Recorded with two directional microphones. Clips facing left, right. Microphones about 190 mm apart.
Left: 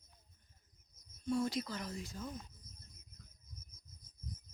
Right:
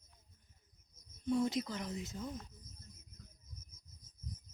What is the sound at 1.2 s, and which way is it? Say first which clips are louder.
Speech: right 2 dB; 20° right (ahead or behind).